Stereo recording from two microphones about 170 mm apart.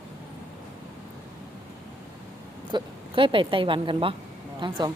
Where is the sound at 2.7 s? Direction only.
30° right (ahead or behind).